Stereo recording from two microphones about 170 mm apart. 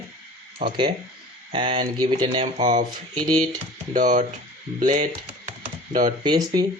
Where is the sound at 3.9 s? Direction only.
50° right (ahead or behind).